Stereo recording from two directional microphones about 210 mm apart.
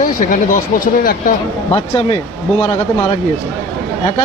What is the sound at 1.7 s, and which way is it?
Speech, 25° left (ahead or behind).